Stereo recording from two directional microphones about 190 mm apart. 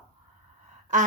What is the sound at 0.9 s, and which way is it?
Speech, 40° right (ahead or behind).